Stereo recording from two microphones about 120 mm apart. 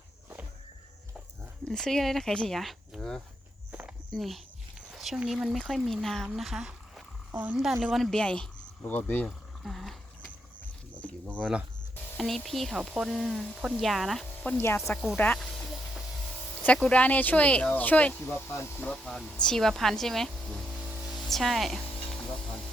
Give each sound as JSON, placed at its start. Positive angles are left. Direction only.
{"t": 1.6, "sound": "speech", "side_deg": 5}
{"t": 7.3, "sound": "speech", "side_deg": -15}
{"t": 7.5, "sound": "speech", "side_deg": 0}
{"t": 9.2, "sound": "speech", "side_deg": 0}
{"t": 11.0, "sound": "a sound", "side_deg": 10}
{"t": 12.1, "sound": "speech", "side_deg": 0}
{"t": 14.5, "sound": "speech", "side_deg": 15}
{"t": 16.6, "sound": "speech", "side_deg": 10}
{"t": 18.9, "sound": "speech", "side_deg": 0}
{"t": 20.7, "sound": "music", "side_deg": 0}